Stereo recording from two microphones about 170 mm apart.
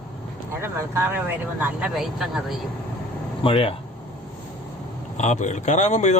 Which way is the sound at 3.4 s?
30° left (ahead or behind).